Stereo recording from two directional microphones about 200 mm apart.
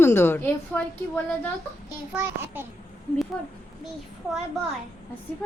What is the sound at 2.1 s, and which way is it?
Speech, 10° right (ahead or behind).